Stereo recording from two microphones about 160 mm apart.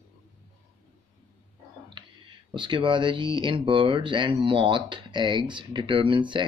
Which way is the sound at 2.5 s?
30° right (ahead or behind).